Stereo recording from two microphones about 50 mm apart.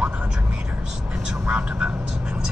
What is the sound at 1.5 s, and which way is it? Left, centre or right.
Vehicle, right.